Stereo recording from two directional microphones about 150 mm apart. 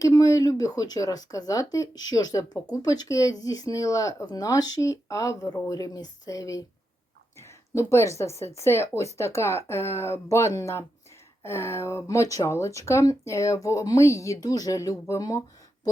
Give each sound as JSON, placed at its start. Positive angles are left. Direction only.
{"t": 0.0, "sound": "speech", "side_deg": 20}